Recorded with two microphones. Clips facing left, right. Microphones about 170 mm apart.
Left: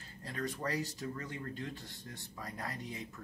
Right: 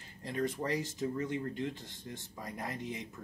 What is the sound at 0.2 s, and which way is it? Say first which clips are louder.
Speech: right 4 dB; 20° right (ahead or behind).